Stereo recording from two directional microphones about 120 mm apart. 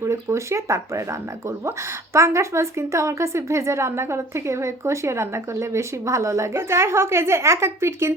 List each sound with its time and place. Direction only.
0.0 s a woman's voice: 25° right (ahead or behind)
2.1 s a woman's voice: 25° right (ahead or behind)